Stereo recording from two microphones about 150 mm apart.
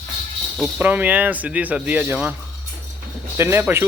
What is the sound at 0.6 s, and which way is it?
Speech, 15° right (ahead or behind).